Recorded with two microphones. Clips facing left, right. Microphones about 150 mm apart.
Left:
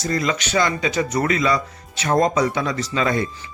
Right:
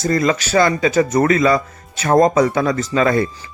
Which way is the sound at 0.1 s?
45° right (ahead or behind).